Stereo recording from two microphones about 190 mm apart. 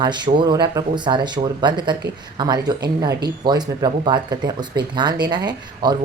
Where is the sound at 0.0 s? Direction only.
25° right (ahead or behind).